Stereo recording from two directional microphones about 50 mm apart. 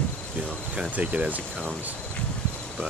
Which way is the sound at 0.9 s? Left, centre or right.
Right.